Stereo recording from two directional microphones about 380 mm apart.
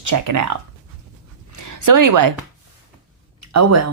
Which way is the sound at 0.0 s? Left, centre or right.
Right.